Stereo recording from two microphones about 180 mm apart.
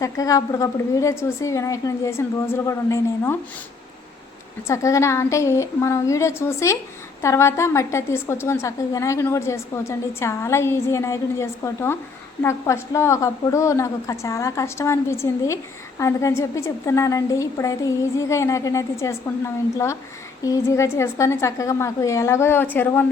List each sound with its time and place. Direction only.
0.0 s a woman's voice: 20° left (ahead or behind)
4.6 s a woman's voice: 15° left (ahead or behind)